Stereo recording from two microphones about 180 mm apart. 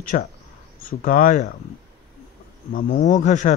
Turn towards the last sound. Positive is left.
turn(degrees=40)  # may be behind; listen again after turning